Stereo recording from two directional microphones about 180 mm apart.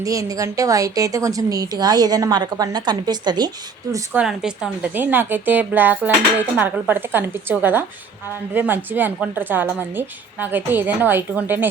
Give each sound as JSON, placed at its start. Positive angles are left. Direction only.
{"t": 0.0, "sound": "a woman's voice", "side_deg": -20}
{"t": 3.9, "sound": "a woman's voice", "side_deg": -5}